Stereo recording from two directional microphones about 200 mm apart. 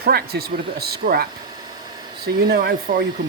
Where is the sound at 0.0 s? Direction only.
50° right (ahead or behind).